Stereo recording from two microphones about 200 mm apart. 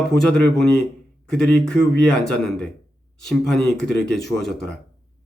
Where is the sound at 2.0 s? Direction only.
5° left (ahead or behind).